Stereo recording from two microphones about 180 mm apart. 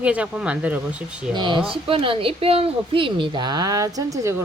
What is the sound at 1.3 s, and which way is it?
Speech, 25° right (ahead or behind).